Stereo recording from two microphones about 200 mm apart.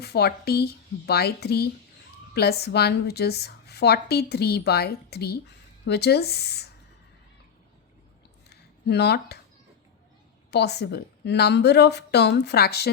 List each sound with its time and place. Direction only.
0.0 s a woman's voice: 55° left (ahead or behind)
8.4 s a sound: 55° left (ahead or behind)
10.5 s a woman's voice: 55° left (ahead or behind)